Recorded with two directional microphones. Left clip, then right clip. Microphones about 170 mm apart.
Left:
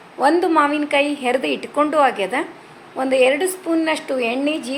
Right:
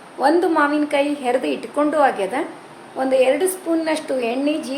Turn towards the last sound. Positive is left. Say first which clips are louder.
# even
turn(degrees=15)  # may be behind; listen again after turning